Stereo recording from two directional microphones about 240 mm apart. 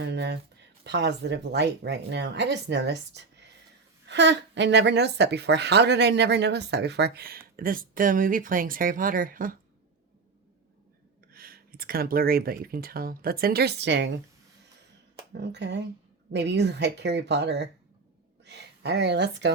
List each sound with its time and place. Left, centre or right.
0.0 s speech: right
11.3 s speech: right
15.4 s speech: right